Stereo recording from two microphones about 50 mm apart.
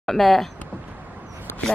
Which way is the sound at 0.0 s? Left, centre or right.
Centre.